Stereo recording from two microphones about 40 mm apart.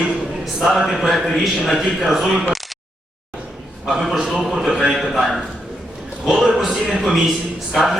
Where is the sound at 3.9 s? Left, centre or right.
Centre.